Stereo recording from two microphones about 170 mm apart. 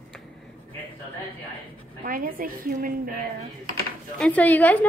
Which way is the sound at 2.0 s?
55° right (ahead or behind).